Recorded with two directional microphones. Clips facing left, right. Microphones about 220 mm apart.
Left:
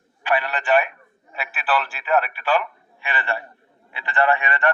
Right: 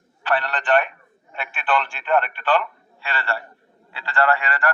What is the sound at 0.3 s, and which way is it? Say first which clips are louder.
A man's voice: even; 10° left (ahead or behind).